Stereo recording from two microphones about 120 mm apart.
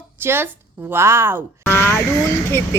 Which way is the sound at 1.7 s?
20° left (ahead or behind).